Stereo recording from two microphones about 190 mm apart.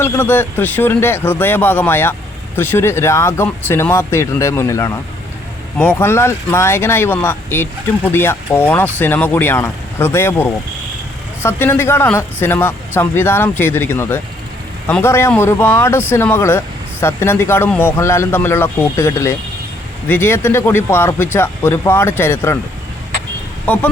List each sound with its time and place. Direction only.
0.0 s speech: 10° left (ahead or behind)
23.6 s speech: 10° left (ahead or behind)